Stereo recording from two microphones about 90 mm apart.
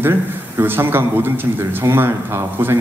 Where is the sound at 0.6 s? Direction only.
25° right (ahead or behind).